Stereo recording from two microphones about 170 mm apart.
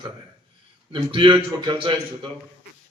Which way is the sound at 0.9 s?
30° right (ahead or behind).